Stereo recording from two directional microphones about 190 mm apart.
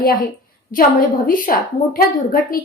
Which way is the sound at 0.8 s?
50° left (ahead or behind).